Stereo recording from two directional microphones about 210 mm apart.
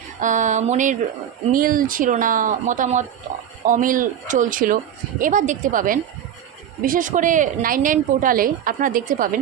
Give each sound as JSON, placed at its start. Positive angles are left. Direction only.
{"t": 0.2, "sound": "a woman's voice", "side_deg": -35}